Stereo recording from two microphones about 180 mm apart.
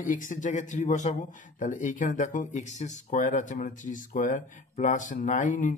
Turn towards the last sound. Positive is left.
turn(degrees=45)  # may be behind; listen again after turning